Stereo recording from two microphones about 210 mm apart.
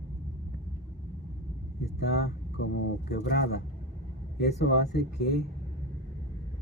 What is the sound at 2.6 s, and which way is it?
Speech, 55° left (ahead or behind).